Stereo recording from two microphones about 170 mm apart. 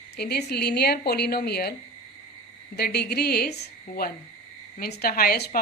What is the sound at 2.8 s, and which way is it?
A woman's voice, 70° left (ahead or behind).